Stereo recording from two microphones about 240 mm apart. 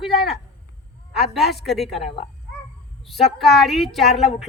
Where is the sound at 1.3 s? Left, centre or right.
Centre.